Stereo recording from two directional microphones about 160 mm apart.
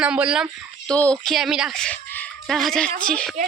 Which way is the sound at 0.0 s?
5° right (ahead or behind).